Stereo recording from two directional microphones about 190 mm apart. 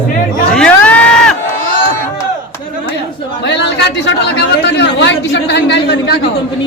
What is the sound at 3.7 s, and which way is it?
A man's voice, 65° left (ahead or behind).